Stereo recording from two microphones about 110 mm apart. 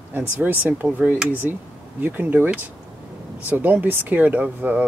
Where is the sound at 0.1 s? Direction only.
15° right (ahead or behind).